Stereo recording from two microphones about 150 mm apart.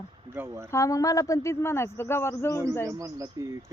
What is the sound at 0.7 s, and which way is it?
A man's voice, 20° left (ahead or behind).